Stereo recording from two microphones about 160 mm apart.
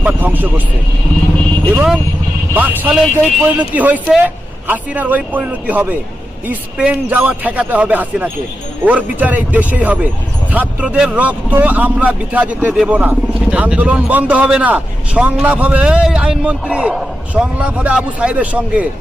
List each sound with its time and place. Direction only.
0.0 s speech: 10° right (ahead or behind)
1.7 s speech: 5° right (ahead or behind)